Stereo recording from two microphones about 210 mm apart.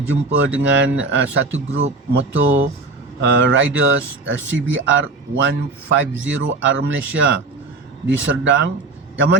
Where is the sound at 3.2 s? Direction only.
60° right (ahead or behind).